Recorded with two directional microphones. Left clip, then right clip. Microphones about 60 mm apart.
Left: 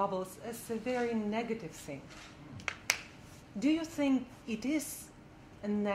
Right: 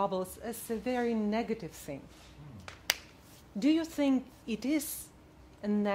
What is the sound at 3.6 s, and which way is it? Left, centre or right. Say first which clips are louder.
A woman's voice: right 3 dB; left.